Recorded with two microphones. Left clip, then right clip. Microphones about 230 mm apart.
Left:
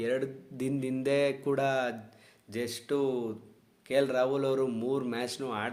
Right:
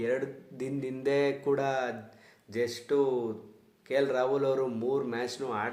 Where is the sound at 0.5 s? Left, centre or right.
Left.